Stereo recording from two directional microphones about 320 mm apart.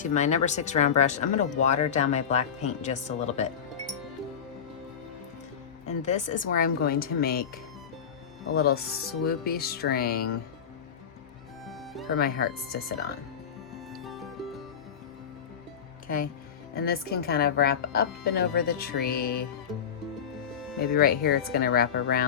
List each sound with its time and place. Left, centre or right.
0.0 s speech: left
6.0 s speech: left
11.6 s music: centre
12.1 s speech: left
13.9 s music: centre
16.0 s speech: left
20.8 s speech: left